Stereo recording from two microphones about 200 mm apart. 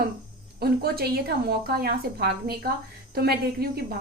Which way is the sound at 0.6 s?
50° right (ahead or behind).